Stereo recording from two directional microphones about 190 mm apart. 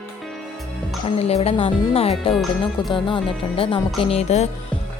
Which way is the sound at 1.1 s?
35° left (ahead or behind).